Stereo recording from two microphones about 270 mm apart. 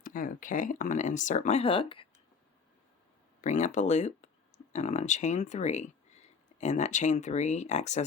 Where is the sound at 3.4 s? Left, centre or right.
Left.